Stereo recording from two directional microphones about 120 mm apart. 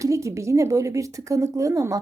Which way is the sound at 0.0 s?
25° right (ahead or behind).